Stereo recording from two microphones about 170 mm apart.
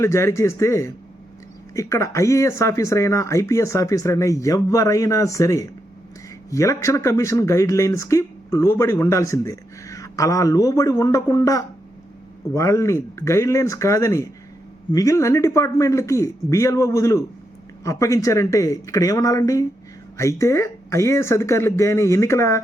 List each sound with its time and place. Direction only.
0.0 s speech: 15° left (ahead or behind)